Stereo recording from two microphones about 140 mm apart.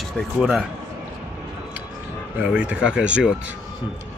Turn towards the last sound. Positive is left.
turn(degrees=-10)  # may be behind; listen again after turning